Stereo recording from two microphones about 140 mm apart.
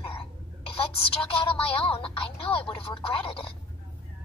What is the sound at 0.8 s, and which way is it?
Speech, 40° left (ahead or behind).